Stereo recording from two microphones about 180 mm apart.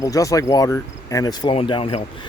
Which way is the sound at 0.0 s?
20° left (ahead or behind).